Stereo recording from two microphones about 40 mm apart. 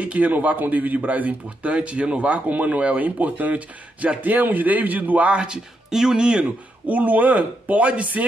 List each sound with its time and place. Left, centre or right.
0.0 s speech: right
5.3 s speech: right
6.9 s speech: right